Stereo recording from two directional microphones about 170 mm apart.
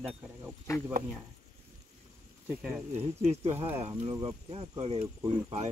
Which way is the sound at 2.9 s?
40° right (ahead or behind).